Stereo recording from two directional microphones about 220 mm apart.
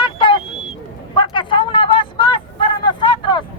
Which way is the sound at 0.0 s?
20° left (ahead or behind).